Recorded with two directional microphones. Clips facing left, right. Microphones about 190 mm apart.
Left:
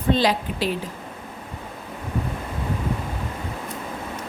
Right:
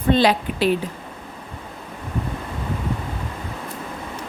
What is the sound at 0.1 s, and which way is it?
Speech, 65° right (ahead or behind).